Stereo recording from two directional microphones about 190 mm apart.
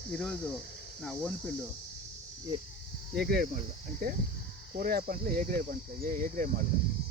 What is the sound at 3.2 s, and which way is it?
Speech, 55° right (ahead or behind).